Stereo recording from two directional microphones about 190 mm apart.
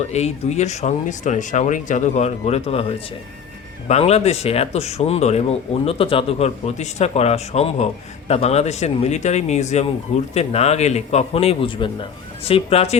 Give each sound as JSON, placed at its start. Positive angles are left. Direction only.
{"t": 0.1, "sound": "speech", "side_deg": 35}